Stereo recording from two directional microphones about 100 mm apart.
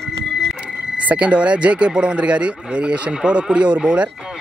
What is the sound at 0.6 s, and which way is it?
Speech, 10° right (ahead or behind).